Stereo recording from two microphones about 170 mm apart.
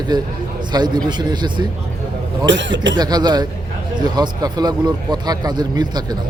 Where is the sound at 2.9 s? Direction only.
25° right (ahead or behind).